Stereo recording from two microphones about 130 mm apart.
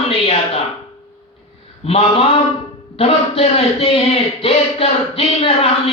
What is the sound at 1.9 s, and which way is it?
Speech, 50° left (ahead or behind).